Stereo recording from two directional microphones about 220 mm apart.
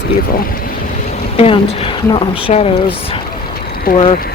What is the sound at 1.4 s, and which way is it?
Speech, 25° left (ahead or behind).